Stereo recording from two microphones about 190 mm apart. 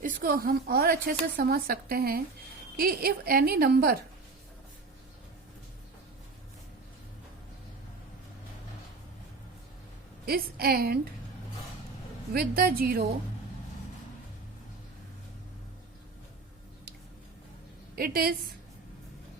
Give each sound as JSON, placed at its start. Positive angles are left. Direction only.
{"t": 0.0, "sound": "a woman's voice", "side_deg": -50}
{"t": 10.2, "sound": "a woman's voice", "side_deg": -50}
{"t": 12.3, "sound": "a woman's voice", "side_deg": -55}
{"t": 17.9, "sound": "a woman's voice", "side_deg": -55}